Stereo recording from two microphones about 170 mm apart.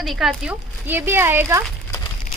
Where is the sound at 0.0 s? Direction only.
Centre (ahead or behind).